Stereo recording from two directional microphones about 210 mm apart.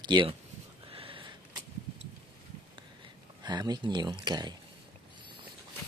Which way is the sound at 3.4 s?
20° right (ahead or behind).